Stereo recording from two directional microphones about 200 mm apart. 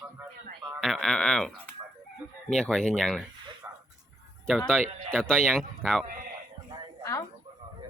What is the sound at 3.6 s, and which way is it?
Music, 10° right (ahead or behind).